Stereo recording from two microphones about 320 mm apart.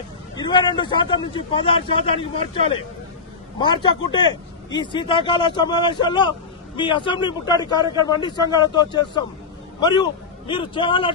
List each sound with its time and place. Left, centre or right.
0.4 s a man's voice: centre